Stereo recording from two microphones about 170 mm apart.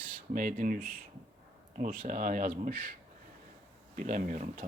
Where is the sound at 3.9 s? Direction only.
50° right (ahead or behind).